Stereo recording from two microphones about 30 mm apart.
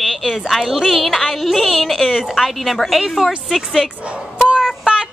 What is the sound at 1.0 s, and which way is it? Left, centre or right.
Music, centre.